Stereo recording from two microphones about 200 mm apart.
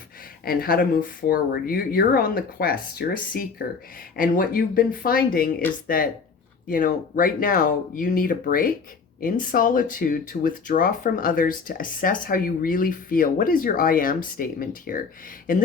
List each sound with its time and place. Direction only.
0.4 s speech: 50° left (ahead or behind)
6.7 s speech: 45° left (ahead or behind)